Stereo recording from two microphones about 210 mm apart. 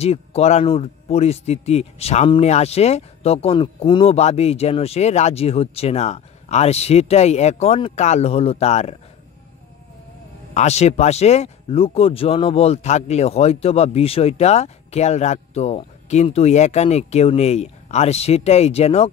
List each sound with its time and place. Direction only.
0.0 s speech: 30° left (ahead or behind)
10.5 s speech: 30° left (ahead or behind)